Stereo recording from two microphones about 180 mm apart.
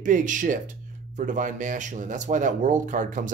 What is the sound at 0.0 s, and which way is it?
Speech, 45° right (ahead or behind).